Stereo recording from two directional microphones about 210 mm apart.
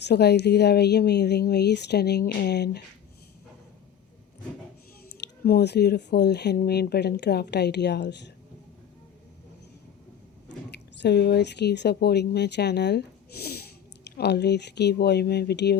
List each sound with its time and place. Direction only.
0.0 s speech: 55° left (ahead or behind)
5.1 s speech: 50° left (ahead or behind)
10.7 s speech: 55° left (ahead or behind)